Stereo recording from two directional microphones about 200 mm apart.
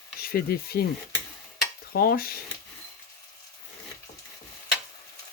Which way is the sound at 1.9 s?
50° left (ahead or behind).